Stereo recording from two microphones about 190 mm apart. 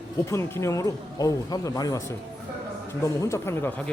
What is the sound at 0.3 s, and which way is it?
Speech, 15° left (ahead or behind).